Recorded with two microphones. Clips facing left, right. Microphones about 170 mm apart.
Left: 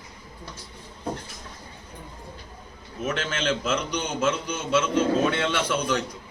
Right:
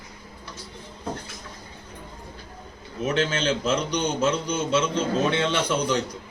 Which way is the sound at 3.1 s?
Centre (ahead or behind).